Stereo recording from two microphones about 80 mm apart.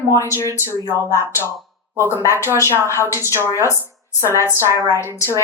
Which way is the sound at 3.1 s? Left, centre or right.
Right.